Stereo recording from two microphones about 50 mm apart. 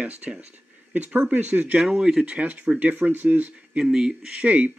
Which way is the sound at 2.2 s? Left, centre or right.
Right.